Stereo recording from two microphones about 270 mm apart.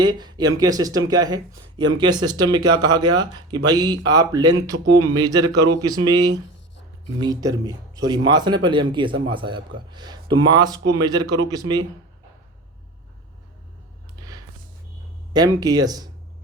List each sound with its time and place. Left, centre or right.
0.0 s speech: centre
14.2 s a sound: centre
15.3 s speech: centre